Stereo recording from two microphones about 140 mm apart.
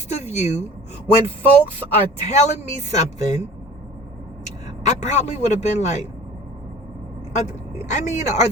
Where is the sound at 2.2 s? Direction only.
55° left (ahead or behind).